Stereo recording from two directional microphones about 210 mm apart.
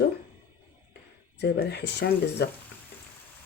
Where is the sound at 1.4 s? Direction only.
55° left (ahead or behind).